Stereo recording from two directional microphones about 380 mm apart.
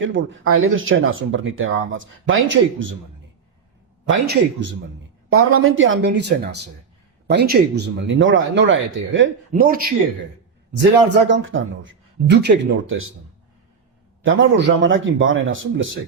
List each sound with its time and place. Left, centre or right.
0.0 s speech: right
4.1 s speech: right
11.1 s speech: right
14.3 s speech: right